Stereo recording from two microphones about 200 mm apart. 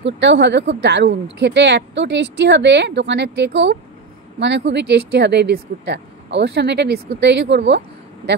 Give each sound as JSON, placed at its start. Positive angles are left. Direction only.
{"t": 0.0, "sound": "speech", "side_deg": -60}